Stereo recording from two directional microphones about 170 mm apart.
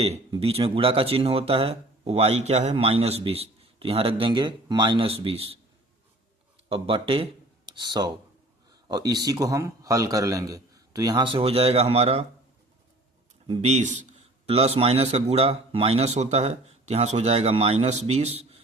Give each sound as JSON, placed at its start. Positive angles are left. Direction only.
{"t": 0.3, "sound": "speech", "side_deg": -35}
{"t": 6.7, "sound": "a man's voice", "side_deg": -30}
{"t": 13.5, "sound": "speech", "side_deg": -40}